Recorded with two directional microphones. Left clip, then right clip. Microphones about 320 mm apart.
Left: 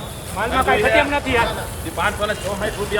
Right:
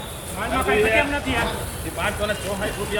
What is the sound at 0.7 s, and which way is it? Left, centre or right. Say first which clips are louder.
Speech: left 2 dB; left.